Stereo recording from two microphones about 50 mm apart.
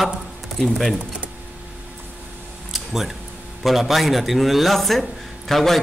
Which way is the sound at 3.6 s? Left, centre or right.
Centre.